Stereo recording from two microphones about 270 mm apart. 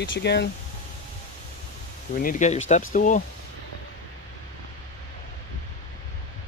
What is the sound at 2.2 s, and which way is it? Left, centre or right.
Speech, left.